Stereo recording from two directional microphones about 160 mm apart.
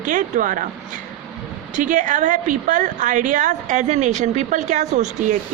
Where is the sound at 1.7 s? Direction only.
55° right (ahead or behind).